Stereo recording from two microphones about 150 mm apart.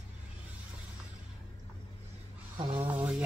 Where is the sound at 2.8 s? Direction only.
10° right (ahead or behind).